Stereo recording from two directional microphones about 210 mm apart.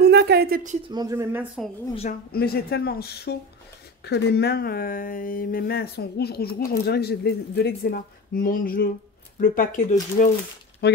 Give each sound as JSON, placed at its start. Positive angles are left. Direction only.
{"t": 0.0, "sound": "a sound", "side_deg": -50}
{"t": 0.8, "sound": "speech", "side_deg": -20}
{"t": 2.3, "sound": "speech", "side_deg": 45}
{"t": 10.8, "sound": "speech", "side_deg": 50}